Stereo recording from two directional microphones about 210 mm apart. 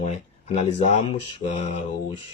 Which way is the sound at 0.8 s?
30° left (ahead or behind).